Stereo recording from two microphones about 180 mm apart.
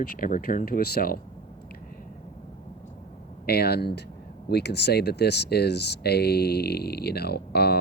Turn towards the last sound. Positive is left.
turn(degrees=60)  # may be behind; listen again after turning